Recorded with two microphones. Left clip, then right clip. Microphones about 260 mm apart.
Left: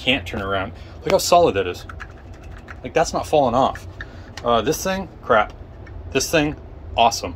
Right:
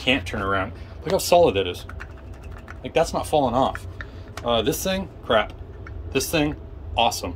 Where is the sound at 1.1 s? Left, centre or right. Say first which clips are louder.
Left 2 dB; centre.